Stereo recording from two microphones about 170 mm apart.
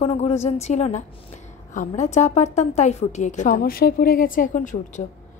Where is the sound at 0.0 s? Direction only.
35° left (ahead or behind).